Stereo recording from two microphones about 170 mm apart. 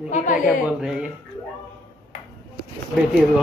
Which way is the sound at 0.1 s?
50° left (ahead or behind).